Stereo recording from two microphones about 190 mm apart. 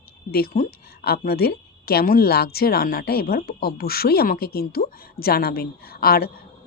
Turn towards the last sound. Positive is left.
turn(degrees=55)  # may be behind; listen again after turning